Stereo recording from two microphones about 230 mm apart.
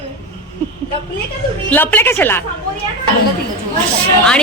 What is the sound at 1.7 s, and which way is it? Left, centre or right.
Speech, centre.